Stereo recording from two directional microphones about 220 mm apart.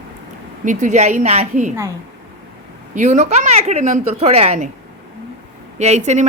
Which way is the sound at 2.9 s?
30° right (ahead or behind).